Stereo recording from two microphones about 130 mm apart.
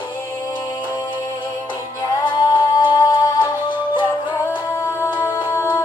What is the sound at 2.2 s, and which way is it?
Music, 35° left (ahead or behind).